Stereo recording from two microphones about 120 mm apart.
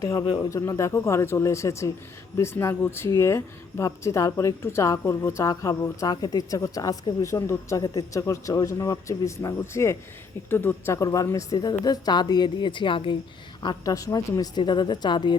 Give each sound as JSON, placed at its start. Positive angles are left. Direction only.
{"t": 0.0, "sound": "speech", "side_deg": 30}
{"t": 13.8, "sound": "speech", "side_deg": 30}